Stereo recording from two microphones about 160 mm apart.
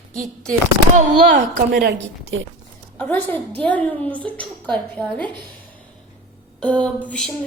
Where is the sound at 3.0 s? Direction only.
10° left (ahead or behind).